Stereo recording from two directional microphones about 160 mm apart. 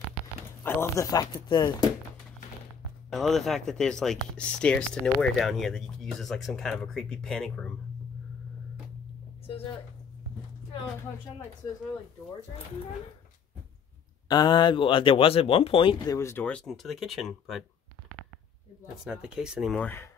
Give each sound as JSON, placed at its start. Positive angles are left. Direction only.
{"t": 0.7, "sound": "speech", "side_deg": 15}
{"t": 3.1, "sound": "speech", "side_deg": 0}
{"t": 14.2, "sound": "speech", "side_deg": 25}
{"t": 16.2, "sound": "speech", "side_deg": 15}
{"t": 19.0, "sound": "speech", "side_deg": -5}
{"t": 19.7, "sound": "speech", "side_deg": 10}